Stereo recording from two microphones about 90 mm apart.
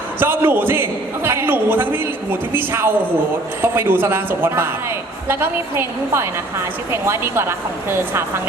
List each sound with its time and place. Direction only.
0.2 s a man's voice: 25° right (ahead or behind)